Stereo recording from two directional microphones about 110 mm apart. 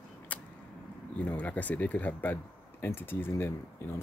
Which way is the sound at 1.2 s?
15° left (ahead or behind).